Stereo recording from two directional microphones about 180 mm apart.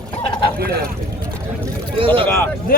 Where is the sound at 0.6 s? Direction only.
60° right (ahead or behind).